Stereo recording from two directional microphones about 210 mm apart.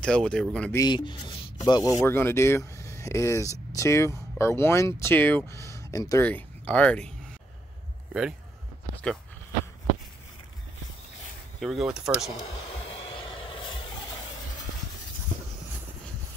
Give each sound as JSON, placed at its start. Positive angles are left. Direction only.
{"t": 0.0, "sound": "speech", "side_deg": 5}
{"t": 0.7, "sound": "speech", "side_deg": 20}
{"t": 8.1, "sound": "speech", "side_deg": -5}
{"t": 11.6, "sound": "speech", "side_deg": 0}
{"t": 12.9, "sound": "vehicle", "side_deg": 25}
{"t": 15.3, "sound": "vehicle", "side_deg": 25}